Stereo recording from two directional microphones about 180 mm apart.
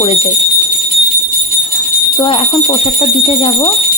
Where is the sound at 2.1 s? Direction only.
30° left (ahead or behind).